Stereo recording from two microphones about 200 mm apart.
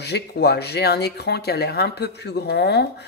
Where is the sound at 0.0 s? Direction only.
55° left (ahead or behind).